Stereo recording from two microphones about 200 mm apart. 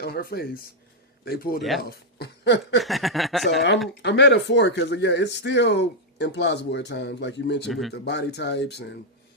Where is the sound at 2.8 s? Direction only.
Centre (ahead or behind).